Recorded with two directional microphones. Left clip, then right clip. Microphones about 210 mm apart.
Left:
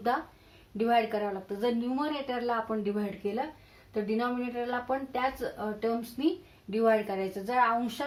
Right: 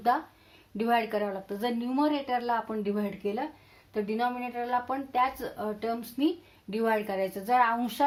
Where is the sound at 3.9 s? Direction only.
40° right (ahead or behind).